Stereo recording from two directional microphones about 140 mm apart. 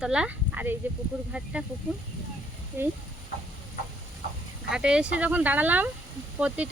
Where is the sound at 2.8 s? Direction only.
15° right (ahead or behind).